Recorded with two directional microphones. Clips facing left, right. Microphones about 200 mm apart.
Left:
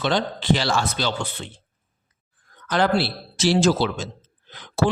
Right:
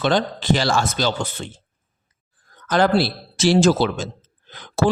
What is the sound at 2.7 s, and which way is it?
Speech, 45° right (ahead or behind).